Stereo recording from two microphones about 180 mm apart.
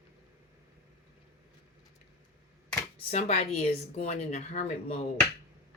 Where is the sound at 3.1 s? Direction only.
35° left (ahead or behind).